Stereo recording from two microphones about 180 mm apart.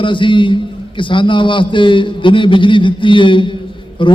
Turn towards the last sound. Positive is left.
turn(degrees=25)  # may be behind; listen again after turning